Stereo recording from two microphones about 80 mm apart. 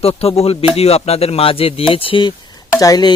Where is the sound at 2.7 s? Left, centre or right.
Left.